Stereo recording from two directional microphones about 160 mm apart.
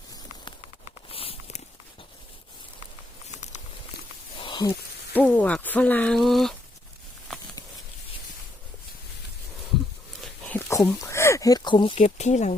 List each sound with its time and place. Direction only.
1.1 s walk: 35° left (ahead or behind)
4.4 s a sound: 30° left (ahead or behind)
5.1 s speech: 10° left (ahead or behind)
7.3 s a sound: 5° left (ahead or behind)
10.7 s speech: 20° left (ahead or behind)
11.9 s speech: 45° left (ahead or behind)